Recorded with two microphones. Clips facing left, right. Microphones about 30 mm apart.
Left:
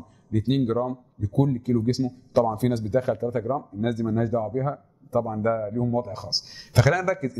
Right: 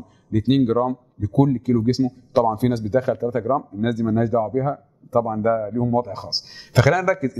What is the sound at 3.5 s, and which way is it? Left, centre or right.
A man's voice, right.